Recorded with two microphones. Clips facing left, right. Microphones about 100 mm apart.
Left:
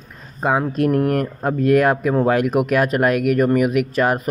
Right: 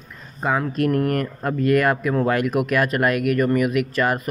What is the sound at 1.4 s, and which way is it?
Speech, 35° left (ahead or behind).